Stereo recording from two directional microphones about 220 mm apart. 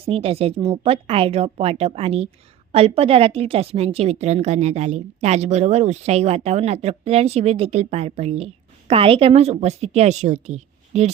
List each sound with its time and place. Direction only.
0.0 s a woman's voice: 25° right (ahead or behind)